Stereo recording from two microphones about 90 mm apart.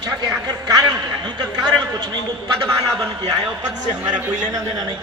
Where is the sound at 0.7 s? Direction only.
50° right (ahead or behind).